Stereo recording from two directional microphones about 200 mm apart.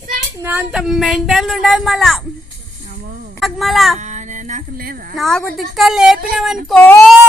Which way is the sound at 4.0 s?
35° right (ahead or behind).